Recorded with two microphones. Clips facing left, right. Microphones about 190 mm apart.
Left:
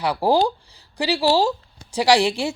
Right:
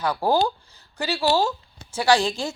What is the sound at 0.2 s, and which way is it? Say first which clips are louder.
Speech: left 4 dB; 30° left (ahead or behind).